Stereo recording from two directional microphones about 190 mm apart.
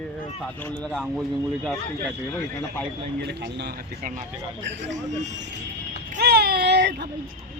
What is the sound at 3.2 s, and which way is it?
Speech, 60° right (ahead or behind).